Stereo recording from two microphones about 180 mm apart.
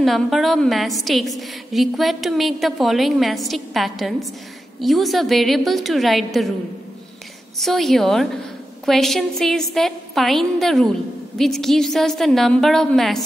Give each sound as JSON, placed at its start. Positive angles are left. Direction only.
{"t": 0.0, "sound": "a woman's voice", "side_deg": 0}
{"t": 7.5, "sound": "a woman's voice", "side_deg": 0}